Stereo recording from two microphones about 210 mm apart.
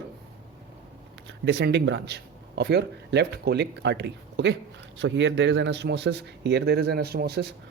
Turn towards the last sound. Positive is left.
turn(degrees=-50)  # may be behind; listen again after turning